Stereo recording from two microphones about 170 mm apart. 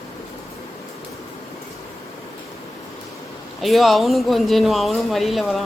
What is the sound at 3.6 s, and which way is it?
Speech, centre (ahead or behind).